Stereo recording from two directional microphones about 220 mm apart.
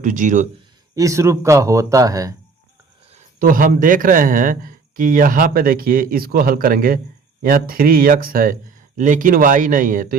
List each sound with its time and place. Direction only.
0.0 s speech: 35° right (ahead or behind)
0.9 s speech: 15° right (ahead or behind)
3.1 s speech: 40° right (ahead or behind)